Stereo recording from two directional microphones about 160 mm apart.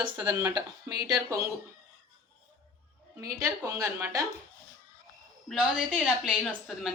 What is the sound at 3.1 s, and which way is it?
Speech, 20° right (ahead or behind).